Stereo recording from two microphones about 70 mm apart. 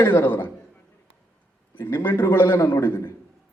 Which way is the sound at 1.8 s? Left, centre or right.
Left.